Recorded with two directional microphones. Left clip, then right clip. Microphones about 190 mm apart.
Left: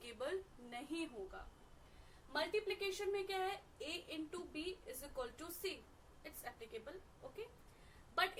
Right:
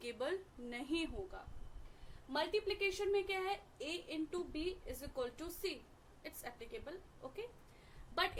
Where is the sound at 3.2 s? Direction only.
45° right (ahead or behind).